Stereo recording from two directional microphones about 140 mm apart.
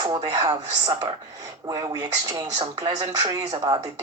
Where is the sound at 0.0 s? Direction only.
30° right (ahead or behind).